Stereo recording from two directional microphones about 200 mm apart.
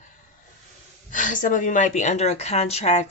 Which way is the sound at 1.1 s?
40° left (ahead or behind).